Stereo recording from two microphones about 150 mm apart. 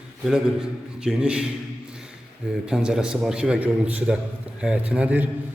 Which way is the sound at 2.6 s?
5° right (ahead or behind).